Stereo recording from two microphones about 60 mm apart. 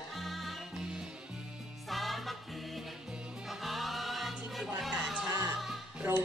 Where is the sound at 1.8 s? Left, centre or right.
Centre.